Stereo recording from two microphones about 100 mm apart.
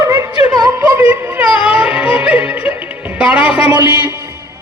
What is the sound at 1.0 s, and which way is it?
Music, 20° right (ahead or behind).